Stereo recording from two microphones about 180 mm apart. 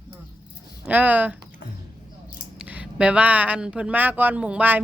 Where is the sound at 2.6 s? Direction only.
5° right (ahead or behind).